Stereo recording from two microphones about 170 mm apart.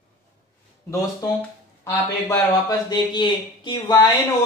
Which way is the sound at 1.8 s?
10° left (ahead or behind).